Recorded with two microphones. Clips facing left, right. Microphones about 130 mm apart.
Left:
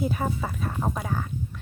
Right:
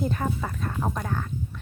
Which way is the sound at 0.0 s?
5° left (ahead or behind).